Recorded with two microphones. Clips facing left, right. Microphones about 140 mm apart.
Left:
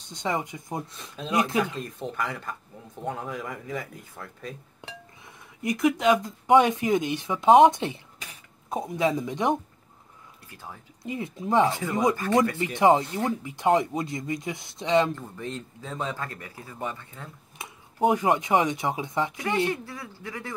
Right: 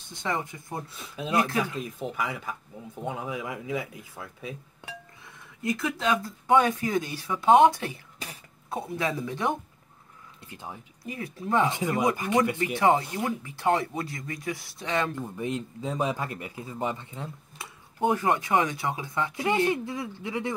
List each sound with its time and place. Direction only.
0.1 s speech: 20° left (ahead or behind)
0.9 s speech: 5° right (ahead or behind)
1.3 s speech: 20° left (ahead or behind)
1.6 s speech: 5° right (ahead or behind)
5.6 s speech: 20° left (ahead or behind)
10.5 s speech: 20° right (ahead or behind)
11.1 s speech: 20° left (ahead or behind)
12.2 s speech: 15° right (ahead or behind)
12.7 s speech: 20° left (ahead or behind)
15.1 s speech: 15° right (ahead or behind)
17.6 s speech: 20° left (ahead or behind)
19.3 s speech: 20° right (ahead or behind)